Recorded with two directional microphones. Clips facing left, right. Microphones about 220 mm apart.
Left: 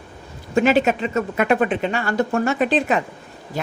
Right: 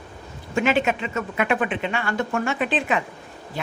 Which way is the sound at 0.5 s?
40° left (ahead or behind).